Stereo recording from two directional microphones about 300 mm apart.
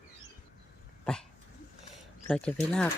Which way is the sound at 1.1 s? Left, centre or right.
Centre.